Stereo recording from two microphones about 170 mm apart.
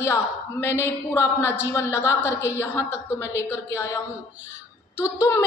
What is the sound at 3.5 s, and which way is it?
Speech, 15° left (ahead or behind).